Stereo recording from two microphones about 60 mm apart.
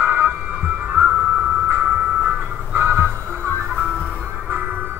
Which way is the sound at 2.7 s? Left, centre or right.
Right.